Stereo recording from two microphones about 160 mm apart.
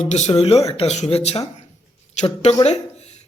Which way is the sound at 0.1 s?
45° left (ahead or behind).